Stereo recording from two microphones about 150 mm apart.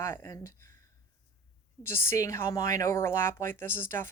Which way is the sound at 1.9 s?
15° left (ahead or behind).